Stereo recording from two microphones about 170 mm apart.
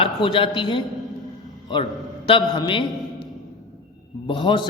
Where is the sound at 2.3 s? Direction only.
25° left (ahead or behind).